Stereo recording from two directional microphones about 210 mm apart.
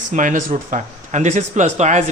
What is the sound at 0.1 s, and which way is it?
A man's voice, 35° right (ahead or behind).